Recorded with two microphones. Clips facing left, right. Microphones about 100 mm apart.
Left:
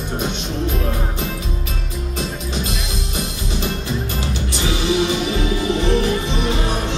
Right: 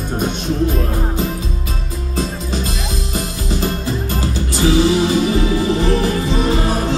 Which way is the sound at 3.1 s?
40° right (ahead or behind).